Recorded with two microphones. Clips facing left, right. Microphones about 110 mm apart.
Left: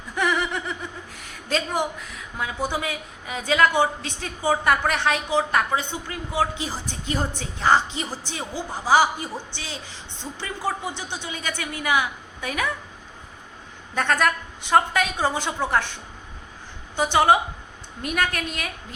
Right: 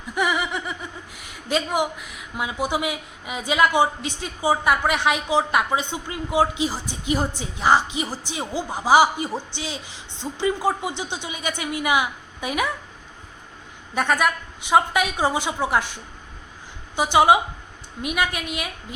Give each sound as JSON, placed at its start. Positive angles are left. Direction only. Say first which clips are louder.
{"t": 0.2, "sound": "snicker", "louder": "even", "side_deg": -5}
{"t": 1.3, "sound": "speech", "louder": "right 2 dB", "side_deg": -15}
{"t": 13.9, "sound": "speech", "louder": "right 1 dB", "side_deg": -10}
{"t": 16.9, "sound": "speech", "louder": "right 2 dB", "side_deg": -10}